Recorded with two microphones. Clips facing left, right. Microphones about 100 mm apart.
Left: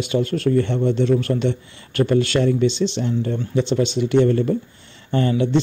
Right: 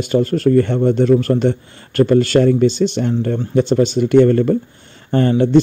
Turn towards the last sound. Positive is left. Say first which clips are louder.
# right 5 dB
turn(degrees=-45)  # may be behind; listen again after turning